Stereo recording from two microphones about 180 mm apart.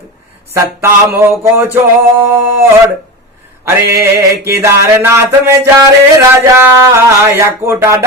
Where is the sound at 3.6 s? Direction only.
15° right (ahead or behind).